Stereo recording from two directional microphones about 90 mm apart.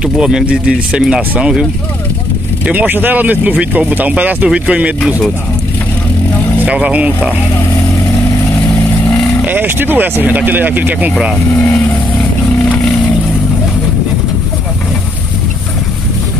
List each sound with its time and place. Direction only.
0.0 s speech: 5° right (ahead or behind)
6.6 s speech: 15° right (ahead or behind)
9.5 s speech: 20° right (ahead or behind)
11.5 s speech: 25° left (ahead or behind)
12.6 s vehicle: 15° left (ahead or behind)